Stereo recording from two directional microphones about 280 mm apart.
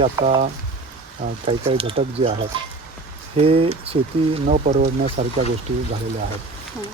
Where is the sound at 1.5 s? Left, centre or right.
Centre.